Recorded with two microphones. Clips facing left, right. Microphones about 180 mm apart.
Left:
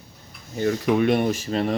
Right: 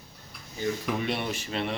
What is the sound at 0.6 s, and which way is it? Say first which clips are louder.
Speech: left 9 dB; 65° left (ahead or behind).